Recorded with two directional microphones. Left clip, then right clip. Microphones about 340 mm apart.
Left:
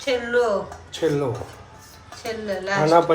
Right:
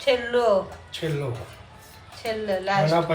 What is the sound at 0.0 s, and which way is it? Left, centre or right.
Speech, centre.